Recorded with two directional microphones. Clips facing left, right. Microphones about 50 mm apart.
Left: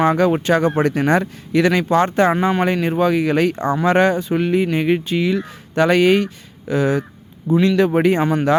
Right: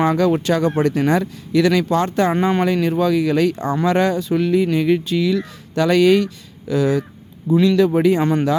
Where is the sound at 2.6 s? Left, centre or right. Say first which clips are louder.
Even; left.